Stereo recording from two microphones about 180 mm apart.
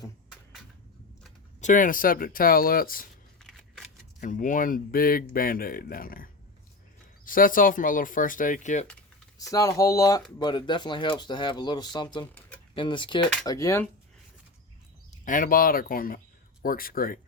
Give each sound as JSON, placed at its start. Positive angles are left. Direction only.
{"t": 1.6, "sound": "speech", "side_deg": 45}
{"t": 3.4, "sound": "scissors", "side_deg": 0}
{"t": 4.2, "sound": "speech", "side_deg": 45}
{"t": 7.3, "sound": "speech", "side_deg": 50}
{"t": 9.5, "sound": "speech", "side_deg": 20}
{"t": 15.2, "sound": "speech", "side_deg": 50}